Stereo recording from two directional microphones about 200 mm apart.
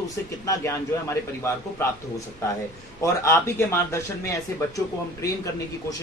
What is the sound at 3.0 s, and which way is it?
A man's voice, 15° left (ahead or behind).